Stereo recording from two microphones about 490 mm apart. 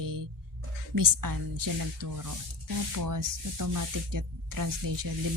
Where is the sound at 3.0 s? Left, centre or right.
Right.